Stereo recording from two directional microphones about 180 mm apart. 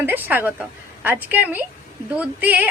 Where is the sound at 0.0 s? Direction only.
10° right (ahead or behind).